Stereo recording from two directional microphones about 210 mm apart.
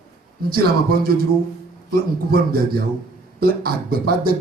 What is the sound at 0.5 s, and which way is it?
Speech, 45° right (ahead or behind).